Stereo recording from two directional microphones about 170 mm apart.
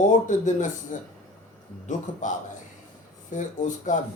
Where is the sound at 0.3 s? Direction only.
50° left (ahead or behind).